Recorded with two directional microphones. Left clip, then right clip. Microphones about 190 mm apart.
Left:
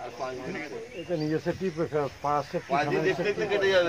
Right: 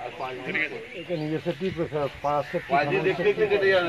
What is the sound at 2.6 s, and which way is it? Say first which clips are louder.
Speech: right 3 dB; 25° left (ahead or behind).